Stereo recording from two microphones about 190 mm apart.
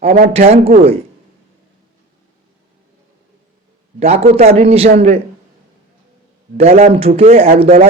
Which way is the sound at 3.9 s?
35° right (ahead or behind).